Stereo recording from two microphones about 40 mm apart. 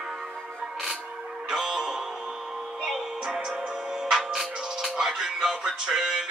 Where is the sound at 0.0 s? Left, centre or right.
Centre.